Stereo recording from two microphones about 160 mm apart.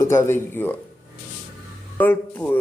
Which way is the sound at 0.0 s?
15° left (ahead or behind).